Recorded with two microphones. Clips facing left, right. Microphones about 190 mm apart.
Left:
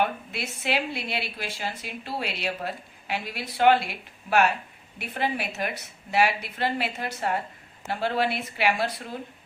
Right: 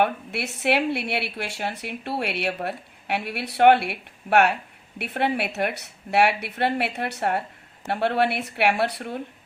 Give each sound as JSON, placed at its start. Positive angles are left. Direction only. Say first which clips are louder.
{"t": 0.0, "sound": "a woman's voice", "louder": "right 4 dB", "side_deg": -65}